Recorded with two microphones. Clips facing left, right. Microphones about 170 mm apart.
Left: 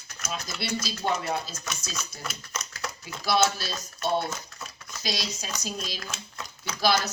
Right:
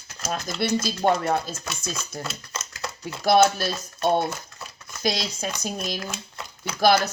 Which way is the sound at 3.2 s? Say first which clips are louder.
Right 7 dB; 55° right (ahead or behind).